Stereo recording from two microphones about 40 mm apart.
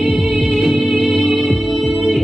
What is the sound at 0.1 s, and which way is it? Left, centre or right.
Music, centre.